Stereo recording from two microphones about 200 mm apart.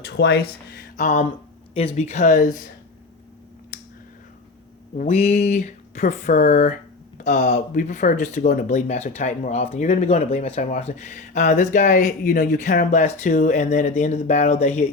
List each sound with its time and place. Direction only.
0.1 s speech: 55° left (ahead or behind); by 2.5 s 40° left (ahead or behind)
4.9 s speech: 30° left (ahead or behind)